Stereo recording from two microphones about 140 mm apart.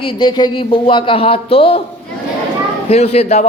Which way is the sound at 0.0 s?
35° left (ahead or behind).